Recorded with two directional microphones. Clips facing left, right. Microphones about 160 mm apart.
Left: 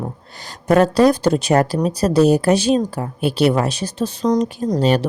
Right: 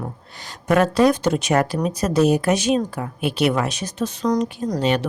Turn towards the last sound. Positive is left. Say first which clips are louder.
# left 4 dB
turn(degrees=40)  # may be behind; listen again after turning